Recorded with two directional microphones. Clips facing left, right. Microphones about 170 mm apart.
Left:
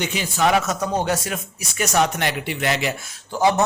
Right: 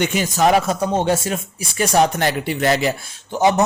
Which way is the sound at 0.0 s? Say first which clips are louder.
Right 4 dB; 50° right (ahead or behind).